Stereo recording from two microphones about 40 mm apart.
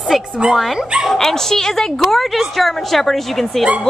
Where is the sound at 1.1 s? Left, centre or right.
Centre.